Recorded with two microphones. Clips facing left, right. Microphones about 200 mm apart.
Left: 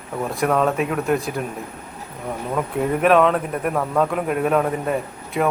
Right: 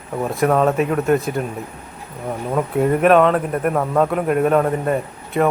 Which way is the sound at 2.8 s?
Centre (ahead or behind).